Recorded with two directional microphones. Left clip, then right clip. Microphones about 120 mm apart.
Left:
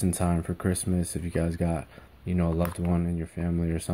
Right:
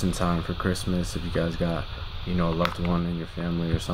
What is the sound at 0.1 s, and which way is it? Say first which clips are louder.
Speech: right 2 dB; 30° left (ahead or behind).